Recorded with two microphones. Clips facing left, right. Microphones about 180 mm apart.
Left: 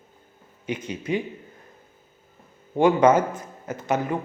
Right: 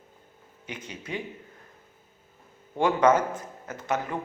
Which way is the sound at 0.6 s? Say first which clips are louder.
Left 10 dB; 15° left (ahead or behind).